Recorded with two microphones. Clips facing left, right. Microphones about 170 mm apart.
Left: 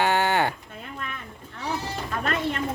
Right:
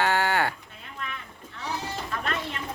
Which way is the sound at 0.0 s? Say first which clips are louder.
Left 2 dB; 20° left (ahead or behind).